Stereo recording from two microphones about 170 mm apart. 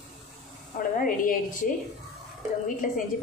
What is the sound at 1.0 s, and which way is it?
Speech, 50° left (ahead or behind).